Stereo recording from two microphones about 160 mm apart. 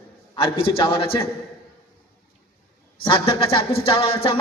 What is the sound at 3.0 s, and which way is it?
A man's voice, 35° left (ahead or behind).